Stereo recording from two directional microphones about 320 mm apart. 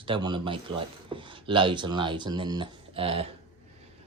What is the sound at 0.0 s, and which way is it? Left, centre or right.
Speech, centre.